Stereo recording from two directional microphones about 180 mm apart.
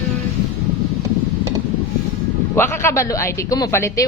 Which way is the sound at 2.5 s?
15° left (ahead or behind).